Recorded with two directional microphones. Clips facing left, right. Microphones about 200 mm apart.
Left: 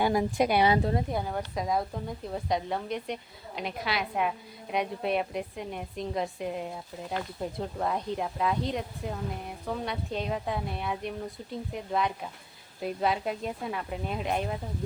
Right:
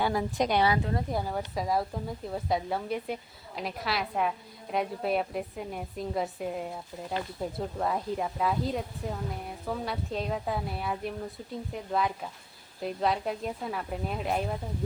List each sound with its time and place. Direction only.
0.0 s speech: 15° left (ahead or behind)
0.7 s speech: 30° left (ahead or behind)
1.1 s speech: centre (ahead or behind)